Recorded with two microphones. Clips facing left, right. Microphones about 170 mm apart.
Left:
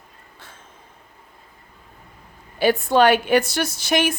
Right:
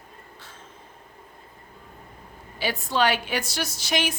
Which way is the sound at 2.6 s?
55° left (ahead or behind).